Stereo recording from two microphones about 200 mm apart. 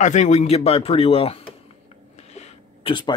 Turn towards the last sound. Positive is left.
turn(degrees=25)  # may be behind; listen again after turning